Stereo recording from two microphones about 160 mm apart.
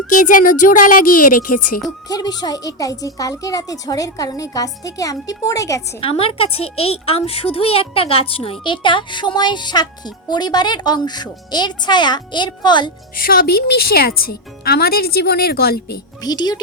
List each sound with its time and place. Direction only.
0.3 s speech: 55° left (ahead or behind)
2.0 s a woman's voice: 25° left (ahead or behind)
6.0 s a woman's voice: 35° left (ahead or behind)
13.1 s speech: 65° left (ahead or behind)
16.2 s a woman's voice: 25° left (ahead or behind)